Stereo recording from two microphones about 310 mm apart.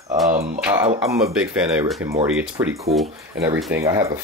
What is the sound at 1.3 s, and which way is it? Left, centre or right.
Speech, centre.